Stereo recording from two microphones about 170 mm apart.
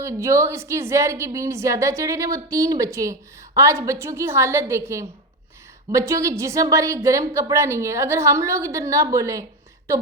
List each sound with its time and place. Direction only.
0.0 s a woman's voice: 15° right (ahead or behind)